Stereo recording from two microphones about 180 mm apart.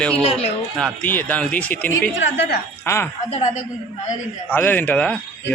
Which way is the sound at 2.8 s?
15° left (ahead or behind).